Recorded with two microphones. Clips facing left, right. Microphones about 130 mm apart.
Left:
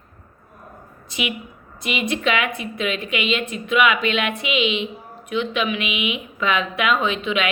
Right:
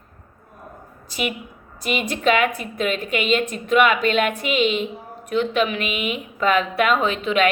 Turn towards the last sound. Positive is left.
turn(degrees=-40)  # may be behind; listen again after turning